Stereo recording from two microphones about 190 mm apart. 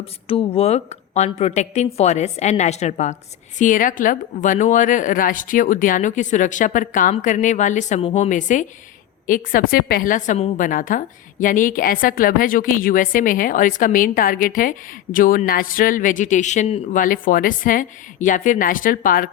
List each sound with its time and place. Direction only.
0.0 s a woman's voice: 30° left (ahead or behind); by 19.3 s 45° left (ahead or behind)